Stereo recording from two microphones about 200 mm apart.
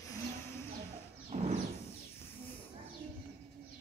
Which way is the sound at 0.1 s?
15° left (ahead or behind).